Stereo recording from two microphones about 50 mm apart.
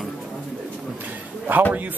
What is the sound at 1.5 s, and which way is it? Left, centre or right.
Speech, right.